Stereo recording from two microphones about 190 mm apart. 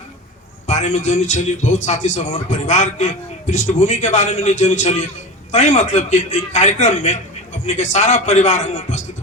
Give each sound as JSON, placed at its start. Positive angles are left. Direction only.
{"t": 0.7, "sound": "a man's voice", "side_deg": 40}